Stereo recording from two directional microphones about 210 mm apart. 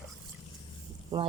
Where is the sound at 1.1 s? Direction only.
15° right (ahead or behind).